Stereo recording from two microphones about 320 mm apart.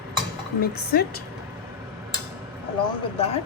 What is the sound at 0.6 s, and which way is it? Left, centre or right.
Speech, left.